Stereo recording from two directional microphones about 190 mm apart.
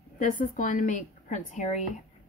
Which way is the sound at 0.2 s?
45° left (ahead or behind).